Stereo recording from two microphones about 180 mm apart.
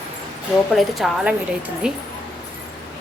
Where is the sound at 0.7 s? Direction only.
Centre (ahead or behind).